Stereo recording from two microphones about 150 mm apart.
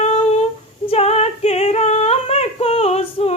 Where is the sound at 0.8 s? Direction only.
45° left (ahead or behind).